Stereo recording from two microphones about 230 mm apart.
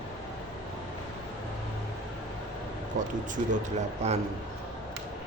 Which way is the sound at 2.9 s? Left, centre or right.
Right.